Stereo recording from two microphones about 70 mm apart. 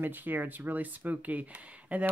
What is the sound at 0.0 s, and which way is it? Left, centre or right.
Speech, right.